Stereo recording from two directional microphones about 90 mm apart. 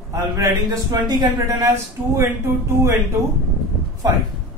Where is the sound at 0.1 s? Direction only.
45° right (ahead or behind).